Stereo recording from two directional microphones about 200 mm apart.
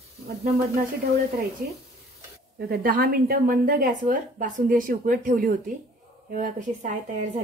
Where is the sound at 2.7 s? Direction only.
45° right (ahead or behind).